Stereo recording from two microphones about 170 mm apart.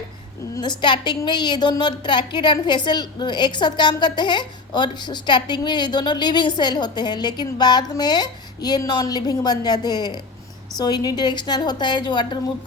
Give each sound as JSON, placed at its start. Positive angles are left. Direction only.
{"t": 0.5, "sound": "a woman's voice", "side_deg": 25}